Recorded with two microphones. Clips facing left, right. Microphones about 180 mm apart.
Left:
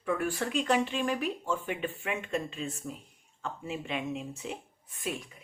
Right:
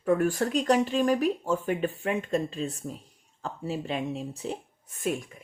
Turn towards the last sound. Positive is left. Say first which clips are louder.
# right 6 dB
turn(degrees=-45)  # may be behind; listen again after turning